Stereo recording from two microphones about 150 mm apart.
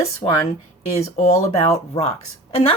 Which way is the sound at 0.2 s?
30° left (ahead or behind).